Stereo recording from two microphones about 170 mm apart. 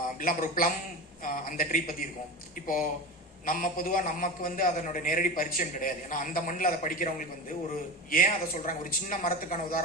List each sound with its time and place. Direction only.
0.2 s a man's voice: 55° left (ahead or behind)